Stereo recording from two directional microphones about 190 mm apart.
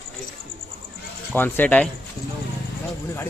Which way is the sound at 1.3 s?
10° left (ahead or behind).